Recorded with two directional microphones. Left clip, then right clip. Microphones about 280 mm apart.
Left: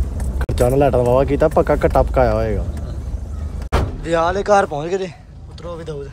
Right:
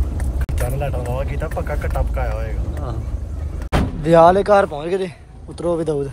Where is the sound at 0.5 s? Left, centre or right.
Left.